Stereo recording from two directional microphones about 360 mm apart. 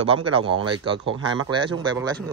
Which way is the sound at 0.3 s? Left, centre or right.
Centre.